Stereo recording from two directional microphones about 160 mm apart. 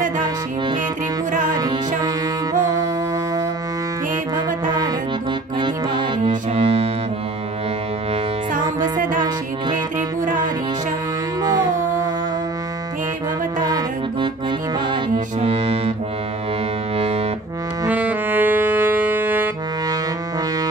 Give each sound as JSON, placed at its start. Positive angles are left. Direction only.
{"t": 1.5, "sound": "music", "side_deg": -25}
{"t": 4.6, "sound": "music", "side_deg": -25}
{"t": 8.9, "sound": "music", "side_deg": -55}
{"t": 11.4, "sound": "music", "side_deg": -20}
{"t": 13.6, "sound": "music", "side_deg": -25}
{"t": 15.4, "sound": "music", "side_deg": -40}
{"t": 16.9, "sound": "music", "side_deg": -40}
{"t": 17.8, "sound": "music", "side_deg": -10}